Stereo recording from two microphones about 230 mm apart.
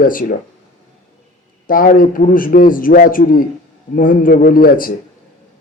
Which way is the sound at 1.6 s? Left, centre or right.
Left.